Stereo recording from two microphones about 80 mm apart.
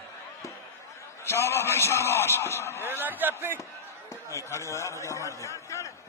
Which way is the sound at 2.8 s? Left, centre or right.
Right.